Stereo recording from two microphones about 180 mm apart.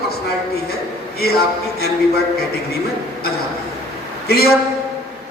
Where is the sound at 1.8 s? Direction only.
60° left (ahead or behind).